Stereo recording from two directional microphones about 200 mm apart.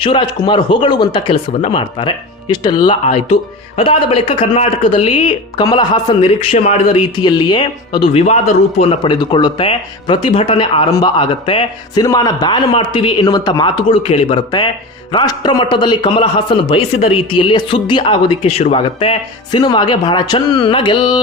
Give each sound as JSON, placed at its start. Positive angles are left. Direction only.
{"t": 0.0, "sound": "speech", "side_deg": 25}